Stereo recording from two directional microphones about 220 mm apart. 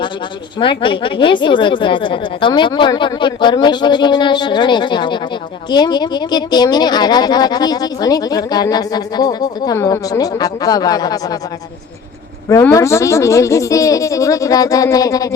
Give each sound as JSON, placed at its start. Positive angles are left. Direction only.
{"t": 0.6, "sound": "a woman's voice", "side_deg": 25}
{"t": 12.5, "sound": "speech", "side_deg": 15}